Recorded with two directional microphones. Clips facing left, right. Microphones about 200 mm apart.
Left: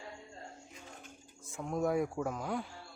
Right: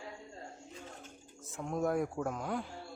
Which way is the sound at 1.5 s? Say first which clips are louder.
Even; centre (ahead or behind).